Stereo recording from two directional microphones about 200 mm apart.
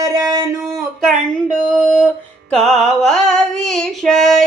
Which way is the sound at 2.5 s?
Centre (ahead or behind).